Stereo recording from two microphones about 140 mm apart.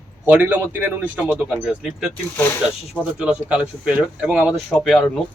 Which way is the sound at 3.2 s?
10° right (ahead or behind).